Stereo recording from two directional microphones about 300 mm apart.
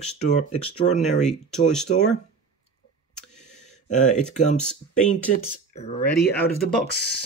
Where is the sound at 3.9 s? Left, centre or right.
Left.